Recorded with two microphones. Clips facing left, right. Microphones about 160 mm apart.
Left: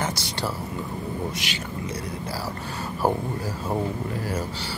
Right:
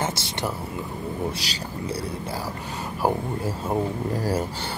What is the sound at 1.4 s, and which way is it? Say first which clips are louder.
Speech: left 2 dB; 35° right (ahead or behind).